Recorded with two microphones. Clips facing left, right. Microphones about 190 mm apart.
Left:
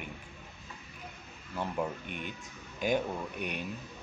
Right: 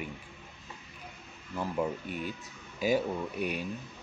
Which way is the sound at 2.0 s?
35° right (ahead or behind).